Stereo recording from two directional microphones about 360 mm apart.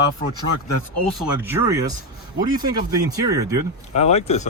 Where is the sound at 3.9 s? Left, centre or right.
Centre.